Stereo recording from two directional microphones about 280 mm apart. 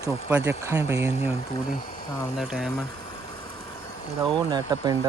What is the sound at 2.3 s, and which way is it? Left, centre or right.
Speech, centre.